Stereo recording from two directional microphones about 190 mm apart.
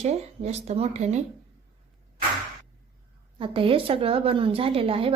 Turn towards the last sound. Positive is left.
turn(degrees=-30)  # may be behind; listen again after turning